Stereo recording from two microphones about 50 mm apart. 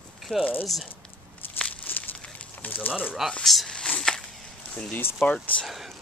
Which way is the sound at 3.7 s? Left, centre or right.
Centre.